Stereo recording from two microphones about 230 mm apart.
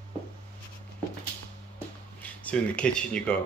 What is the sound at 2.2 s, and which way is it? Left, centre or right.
Speech, centre.